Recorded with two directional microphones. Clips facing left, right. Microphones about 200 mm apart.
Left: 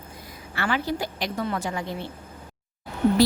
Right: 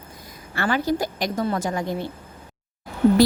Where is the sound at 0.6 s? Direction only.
45° right (ahead or behind).